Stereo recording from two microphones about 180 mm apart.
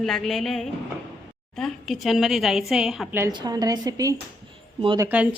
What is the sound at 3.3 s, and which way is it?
A woman's voice, 20° right (ahead or behind).